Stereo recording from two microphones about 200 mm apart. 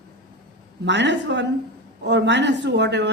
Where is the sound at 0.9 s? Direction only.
60° right (ahead or behind).